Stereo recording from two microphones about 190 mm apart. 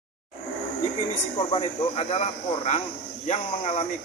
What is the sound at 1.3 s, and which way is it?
Speech, 30° left (ahead or behind).